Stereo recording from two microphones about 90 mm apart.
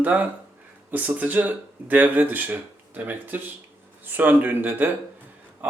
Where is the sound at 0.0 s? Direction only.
20° right (ahead or behind).